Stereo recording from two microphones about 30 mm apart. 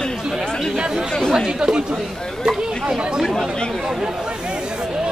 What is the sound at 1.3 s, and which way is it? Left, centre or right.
Chatter, centre.